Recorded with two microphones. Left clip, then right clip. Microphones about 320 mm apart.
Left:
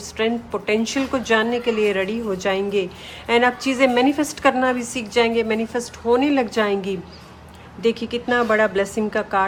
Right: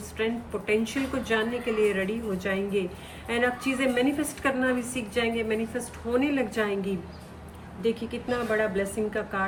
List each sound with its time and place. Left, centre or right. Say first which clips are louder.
0.2 s a woman's voice: left 7 dB; centre